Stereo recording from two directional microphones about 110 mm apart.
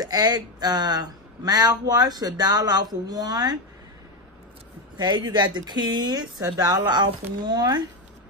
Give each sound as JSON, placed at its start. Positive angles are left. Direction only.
{"t": 0.0, "sound": "speech", "side_deg": -35}
{"t": 4.9, "sound": "speech", "side_deg": -40}